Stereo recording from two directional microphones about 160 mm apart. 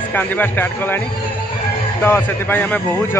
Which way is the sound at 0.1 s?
10° left (ahead or behind).